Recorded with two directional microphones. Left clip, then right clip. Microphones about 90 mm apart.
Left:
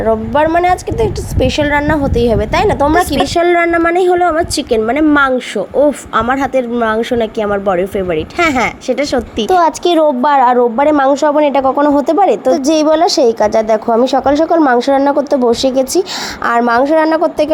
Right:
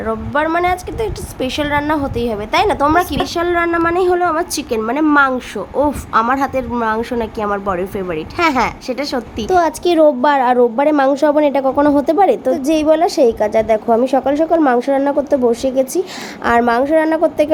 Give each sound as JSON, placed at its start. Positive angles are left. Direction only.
{"t": 0.0, "sound": "a woman's voice", "side_deg": 30}
{"t": 3.7, "sound": "a woman's voice", "side_deg": 20}
{"t": 10.6, "sound": "speech", "side_deg": 20}
{"t": 12.5, "sound": "a woman's voice", "side_deg": 40}